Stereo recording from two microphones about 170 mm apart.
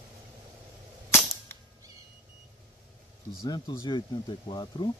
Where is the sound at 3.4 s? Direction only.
25° left (ahead or behind).